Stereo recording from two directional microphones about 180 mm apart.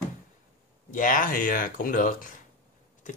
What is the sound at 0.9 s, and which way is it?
Speech, 45° left (ahead or behind).